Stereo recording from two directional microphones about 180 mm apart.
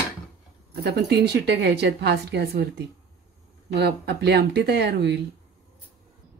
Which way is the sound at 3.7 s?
65° right (ahead or behind).